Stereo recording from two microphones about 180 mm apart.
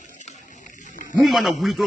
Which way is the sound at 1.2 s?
Centre (ahead or behind).